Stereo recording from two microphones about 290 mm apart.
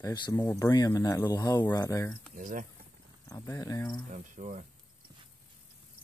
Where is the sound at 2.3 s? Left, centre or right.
Right.